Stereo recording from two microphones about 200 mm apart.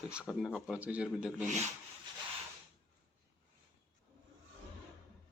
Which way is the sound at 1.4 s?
35° right (ahead or behind).